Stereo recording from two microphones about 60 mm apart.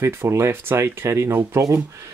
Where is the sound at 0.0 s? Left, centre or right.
Right.